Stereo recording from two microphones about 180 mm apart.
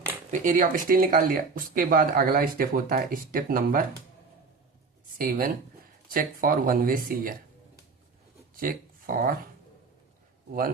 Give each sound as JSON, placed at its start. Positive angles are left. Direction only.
{"t": 0.3, "sound": "speech", "side_deg": -45}
{"t": 5.1, "sound": "speech", "side_deg": -50}
{"t": 8.5, "sound": "a sound", "side_deg": -50}